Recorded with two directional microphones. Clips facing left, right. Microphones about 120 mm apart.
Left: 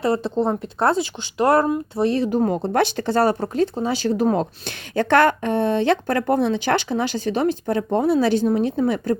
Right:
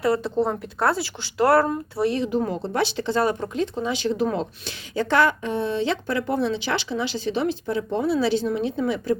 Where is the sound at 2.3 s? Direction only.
50° left (ahead or behind).